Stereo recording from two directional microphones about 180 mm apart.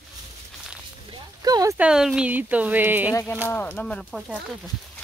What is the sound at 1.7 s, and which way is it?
Speech, 5° right (ahead or behind).